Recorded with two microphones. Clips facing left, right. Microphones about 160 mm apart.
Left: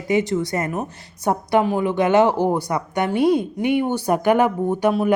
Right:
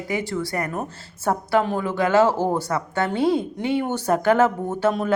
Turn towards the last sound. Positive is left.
turn(degrees=15)  # may be behind; listen again after turning